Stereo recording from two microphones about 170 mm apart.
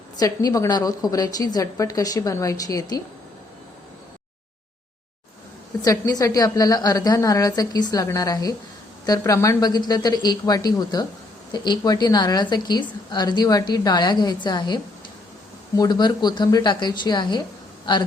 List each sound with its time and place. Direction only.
0.2 s a woman's voice: 20° left (ahead or behind)
5.8 s a woman's voice: 20° left (ahead or behind)